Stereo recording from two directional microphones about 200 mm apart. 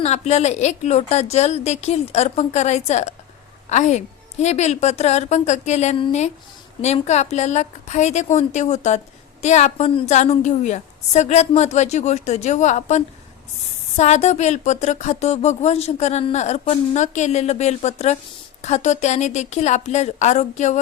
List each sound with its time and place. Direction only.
0.0 s speech: 35° left (ahead or behind)